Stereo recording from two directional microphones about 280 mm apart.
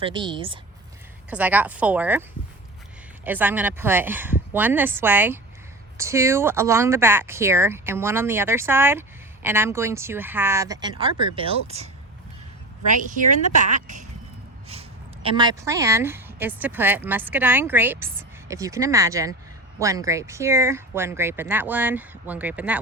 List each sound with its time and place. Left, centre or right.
0.0 s speech: centre
1.3 s speech: centre
3.2 s speech: centre
13.7 s speech: right; by 22.8 s centre